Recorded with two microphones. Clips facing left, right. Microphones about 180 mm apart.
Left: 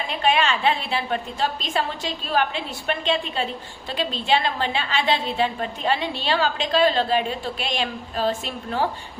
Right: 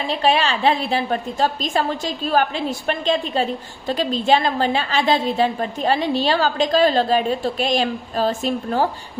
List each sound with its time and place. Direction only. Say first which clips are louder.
0.1 s a woman's voice: right 2 dB; 35° right (ahead or behind)